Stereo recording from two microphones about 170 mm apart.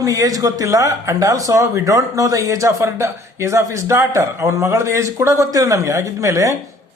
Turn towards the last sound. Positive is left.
turn(degrees=-20)  # may be behind; listen again after turning